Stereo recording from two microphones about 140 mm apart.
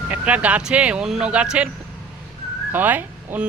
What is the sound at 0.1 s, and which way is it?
Speech, 10° right (ahead or behind).